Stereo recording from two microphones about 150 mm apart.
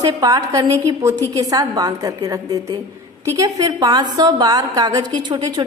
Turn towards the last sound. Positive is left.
turn(degrees=-30)  # may be behind; listen again after turning